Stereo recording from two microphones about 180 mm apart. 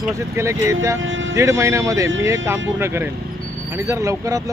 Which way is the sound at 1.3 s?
15° right (ahead or behind).